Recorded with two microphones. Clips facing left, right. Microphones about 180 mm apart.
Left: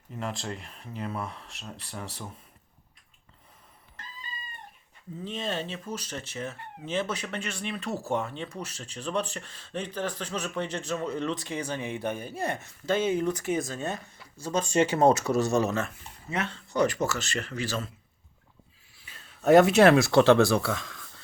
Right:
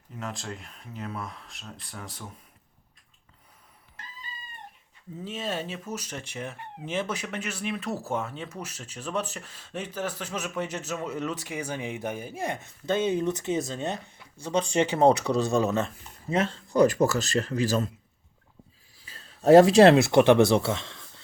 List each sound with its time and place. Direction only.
0.2 s speech: centre (ahead or behind)
5.2 s speech: 5° right (ahead or behind)
16.3 s speech: 30° right (ahead or behind)
19.0 s speech: 35° right (ahead or behind)